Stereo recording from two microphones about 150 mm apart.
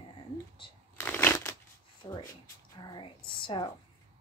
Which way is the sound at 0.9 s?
15° left (ahead or behind).